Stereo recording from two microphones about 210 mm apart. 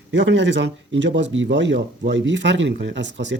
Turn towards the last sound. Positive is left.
turn(degrees=-60)  # may be behind; listen again after turning